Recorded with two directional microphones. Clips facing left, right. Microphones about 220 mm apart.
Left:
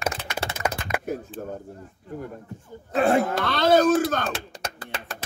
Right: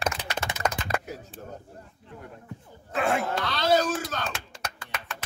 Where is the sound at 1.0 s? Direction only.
50° left (ahead or behind).